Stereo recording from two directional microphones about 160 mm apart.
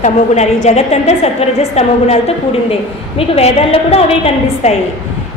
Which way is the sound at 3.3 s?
40° left (ahead or behind).